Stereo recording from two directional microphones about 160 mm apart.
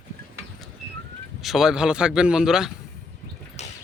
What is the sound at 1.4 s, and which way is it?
Speech, centre (ahead or behind).